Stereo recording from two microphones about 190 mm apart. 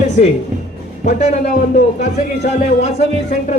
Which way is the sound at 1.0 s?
35° left (ahead or behind).